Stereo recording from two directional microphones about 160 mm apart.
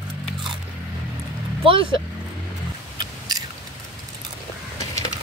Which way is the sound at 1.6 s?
35° right (ahead or behind).